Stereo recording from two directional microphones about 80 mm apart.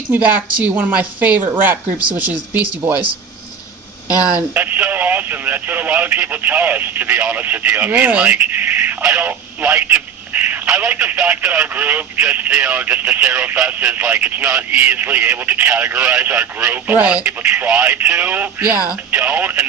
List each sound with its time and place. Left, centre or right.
0.6 s speech: right
4.4 s speech: right